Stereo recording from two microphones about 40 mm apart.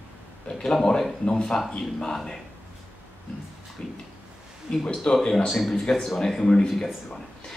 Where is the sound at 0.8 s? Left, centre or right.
Centre.